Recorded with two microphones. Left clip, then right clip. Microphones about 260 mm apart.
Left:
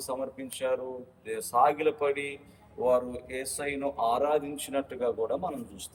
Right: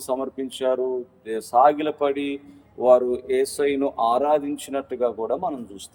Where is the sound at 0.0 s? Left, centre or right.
Right.